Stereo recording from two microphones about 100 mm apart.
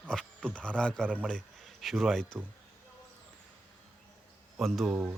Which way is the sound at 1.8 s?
Centre (ahead or behind).